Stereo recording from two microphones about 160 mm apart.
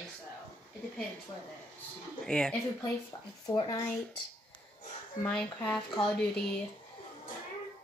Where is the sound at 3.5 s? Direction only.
30° left (ahead or behind).